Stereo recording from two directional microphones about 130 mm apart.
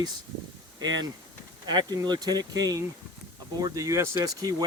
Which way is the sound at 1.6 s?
30° right (ahead or behind).